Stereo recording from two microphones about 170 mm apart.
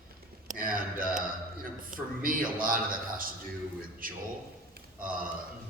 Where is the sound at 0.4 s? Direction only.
55° right (ahead or behind).